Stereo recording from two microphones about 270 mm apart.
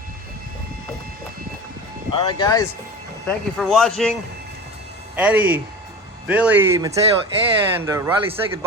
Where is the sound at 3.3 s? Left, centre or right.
Centre.